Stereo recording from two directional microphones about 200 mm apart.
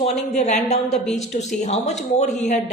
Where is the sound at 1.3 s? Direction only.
35° left (ahead or behind).